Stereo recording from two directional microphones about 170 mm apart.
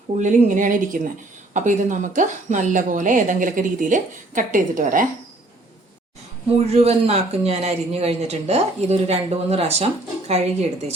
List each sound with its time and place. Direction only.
0.2 s speech: 45° right (ahead or behind)
6.7 s speech: 40° right (ahead or behind)